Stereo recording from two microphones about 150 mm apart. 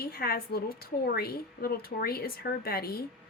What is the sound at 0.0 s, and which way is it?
A woman's voice, 90° left.